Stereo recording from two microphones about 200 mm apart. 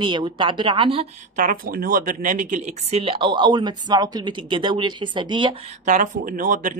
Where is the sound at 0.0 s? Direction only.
25° right (ahead or behind).